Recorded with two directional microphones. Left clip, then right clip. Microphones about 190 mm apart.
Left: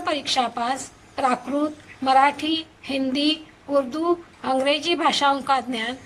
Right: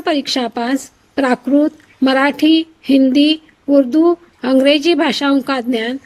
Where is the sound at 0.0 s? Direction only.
50° right (ahead or behind).